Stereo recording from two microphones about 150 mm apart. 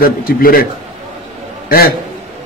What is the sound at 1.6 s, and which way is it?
Speech, 90° left.